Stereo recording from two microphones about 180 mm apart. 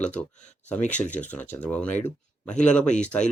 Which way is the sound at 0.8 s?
40° left (ahead or behind).